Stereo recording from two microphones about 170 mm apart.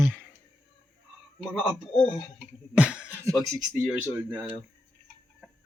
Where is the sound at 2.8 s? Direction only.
5° right (ahead or behind).